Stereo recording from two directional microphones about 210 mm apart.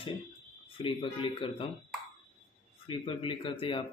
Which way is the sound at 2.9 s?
25° left (ahead or behind).